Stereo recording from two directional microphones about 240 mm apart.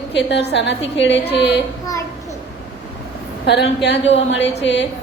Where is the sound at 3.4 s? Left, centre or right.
Left.